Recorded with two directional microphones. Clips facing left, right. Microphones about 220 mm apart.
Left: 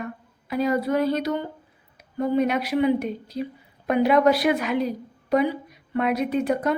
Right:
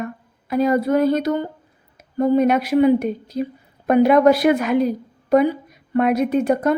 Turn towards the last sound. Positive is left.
turn(degrees=-45)  # may be behind; listen again after turning